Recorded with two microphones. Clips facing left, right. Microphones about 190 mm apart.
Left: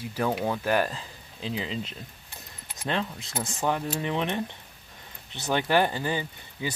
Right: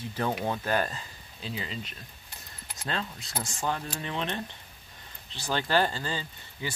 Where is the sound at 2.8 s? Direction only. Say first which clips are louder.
Left 5 dB; 20° left (ahead or behind).